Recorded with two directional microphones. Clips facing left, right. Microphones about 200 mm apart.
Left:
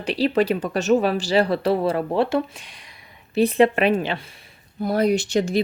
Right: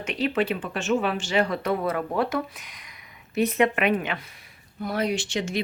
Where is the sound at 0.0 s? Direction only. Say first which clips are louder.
Left 5 dB; 35° left (ahead or behind).